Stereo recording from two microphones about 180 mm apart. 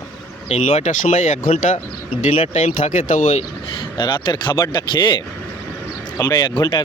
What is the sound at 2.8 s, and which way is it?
Speech, 45° left (ahead or behind).